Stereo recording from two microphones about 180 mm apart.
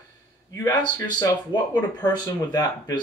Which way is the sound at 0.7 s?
20° left (ahead or behind).